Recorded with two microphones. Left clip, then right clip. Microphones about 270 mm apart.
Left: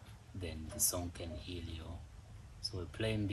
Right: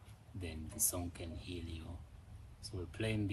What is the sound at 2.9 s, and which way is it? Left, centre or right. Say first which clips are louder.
Speech: left 1 dB; centre.